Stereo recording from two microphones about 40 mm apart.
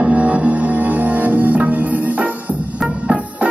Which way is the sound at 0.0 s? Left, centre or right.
Right.